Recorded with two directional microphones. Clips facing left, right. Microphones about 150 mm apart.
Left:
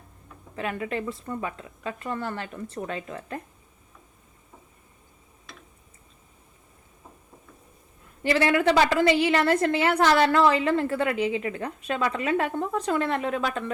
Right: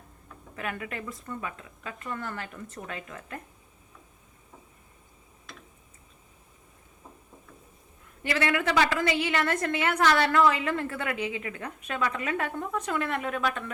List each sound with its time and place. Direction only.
0.5 s a woman's voice: 30° left (ahead or behind)
5.5 s tick-tock: centre (ahead or behind)
8.2 s a woman's voice: 30° left (ahead or behind)